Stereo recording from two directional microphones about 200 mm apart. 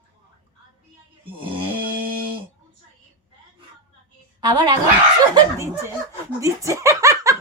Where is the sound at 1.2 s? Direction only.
25° right (ahead or behind).